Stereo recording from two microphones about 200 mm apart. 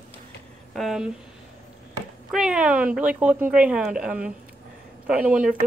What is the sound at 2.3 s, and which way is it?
Speech, 5° right (ahead or behind).